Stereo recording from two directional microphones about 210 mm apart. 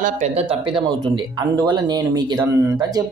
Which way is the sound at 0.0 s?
30° right (ahead or behind).